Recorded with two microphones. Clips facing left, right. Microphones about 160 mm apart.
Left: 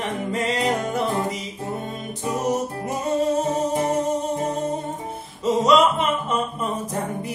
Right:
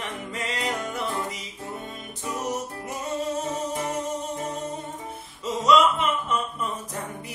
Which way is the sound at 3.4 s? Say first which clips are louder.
Left 7 dB; 35° left (ahead or behind).